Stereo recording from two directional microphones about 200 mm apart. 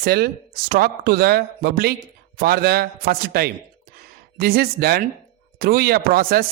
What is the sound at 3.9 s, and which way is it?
Gasp, 50° right (ahead or behind).